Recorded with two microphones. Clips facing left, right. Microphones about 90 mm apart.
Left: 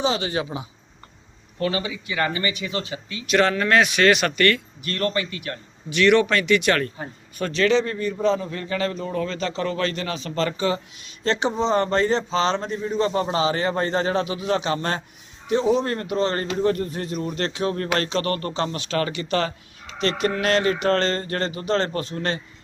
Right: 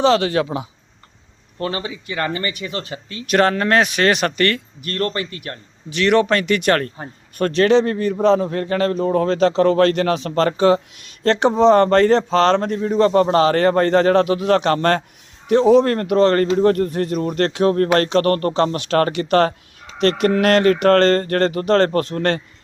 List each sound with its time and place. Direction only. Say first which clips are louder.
0.0 s speech: right 8 dB; 70° right (ahead or behind)
1.6 s speech: even; 35° right (ahead or behind)
7.3 s a man's voice: right 6 dB; 55° right (ahead or behind)